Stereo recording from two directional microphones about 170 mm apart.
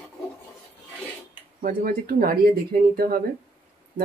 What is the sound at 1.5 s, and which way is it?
Speech, 60° right (ahead or behind).